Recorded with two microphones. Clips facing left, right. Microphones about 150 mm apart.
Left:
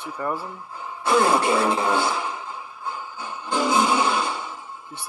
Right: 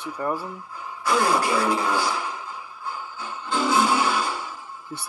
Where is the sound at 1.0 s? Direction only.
25° left (ahead or behind).